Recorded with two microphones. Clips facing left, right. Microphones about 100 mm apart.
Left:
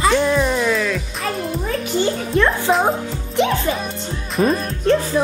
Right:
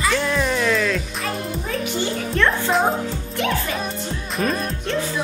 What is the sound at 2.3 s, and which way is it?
Speech, 15° left (ahead or behind).